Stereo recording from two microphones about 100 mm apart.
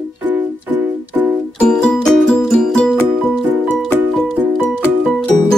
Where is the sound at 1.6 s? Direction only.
5° left (ahead or behind).